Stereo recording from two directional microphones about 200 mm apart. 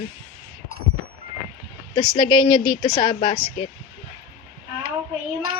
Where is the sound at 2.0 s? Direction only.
25° left (ahead or behind).